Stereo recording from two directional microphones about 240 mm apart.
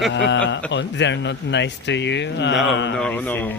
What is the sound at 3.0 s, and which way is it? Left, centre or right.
Speech, centre.